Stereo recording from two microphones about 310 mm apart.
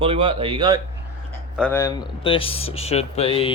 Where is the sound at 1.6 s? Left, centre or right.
Centre.